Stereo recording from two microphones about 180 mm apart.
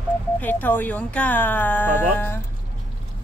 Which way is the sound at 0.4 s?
10° left (ahead or behind).